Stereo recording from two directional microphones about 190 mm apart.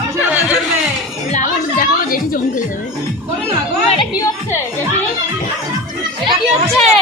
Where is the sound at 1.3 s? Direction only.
45° left (ahead or behind).